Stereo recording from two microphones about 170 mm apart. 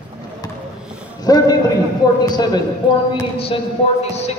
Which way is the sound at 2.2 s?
25° left (ahead or behind).